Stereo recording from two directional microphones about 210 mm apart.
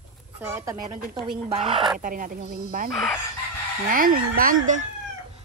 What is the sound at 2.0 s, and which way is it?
Speech, 40° right (ahead or behind).